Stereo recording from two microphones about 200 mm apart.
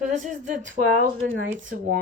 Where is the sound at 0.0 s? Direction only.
35° right (ahead or behind).